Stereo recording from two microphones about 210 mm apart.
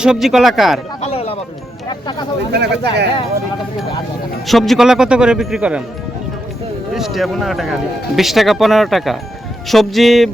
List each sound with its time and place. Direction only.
0.0 s speech: centre (ahead or behind)
1.0 s a sound: 30° left (ahead or behind)
1.9 s speech: 20° left (ahead or behind)
2.5 s speech: 50° right (ahead or behind)
4.4 s speech: centre (ahead or behind)
6.9 s speech: centre (ahead or behind)